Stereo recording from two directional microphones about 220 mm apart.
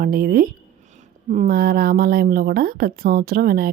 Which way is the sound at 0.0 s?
40° right (ahead or behind).